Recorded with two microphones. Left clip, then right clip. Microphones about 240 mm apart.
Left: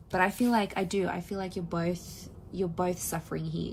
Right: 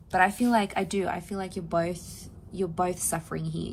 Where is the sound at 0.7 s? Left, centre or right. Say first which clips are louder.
Right 2 dB; right.